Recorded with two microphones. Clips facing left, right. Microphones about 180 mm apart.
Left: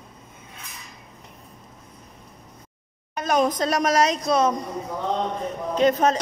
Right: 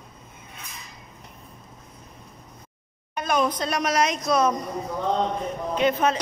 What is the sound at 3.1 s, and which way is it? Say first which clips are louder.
Speech: left 2 dB; 40° left (ahead or behind).